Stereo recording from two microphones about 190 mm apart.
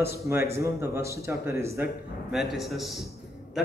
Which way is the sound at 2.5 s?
Centre (ahead or behind).